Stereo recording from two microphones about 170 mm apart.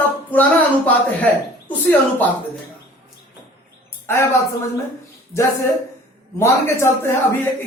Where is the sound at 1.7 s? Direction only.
10° left (ahead or behind).